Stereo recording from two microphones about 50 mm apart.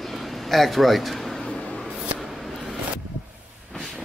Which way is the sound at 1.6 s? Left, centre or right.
Left.